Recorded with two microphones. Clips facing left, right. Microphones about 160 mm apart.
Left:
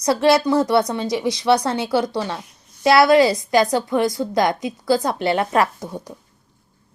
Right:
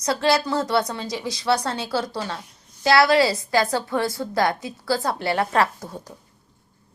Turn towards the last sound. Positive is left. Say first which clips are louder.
# left 5 dB
turn(degrees=15)  # may be behind; listen again after turning